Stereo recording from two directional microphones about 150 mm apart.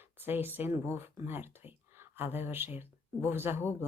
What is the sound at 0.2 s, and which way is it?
Speech, 15° right (ahead or behind).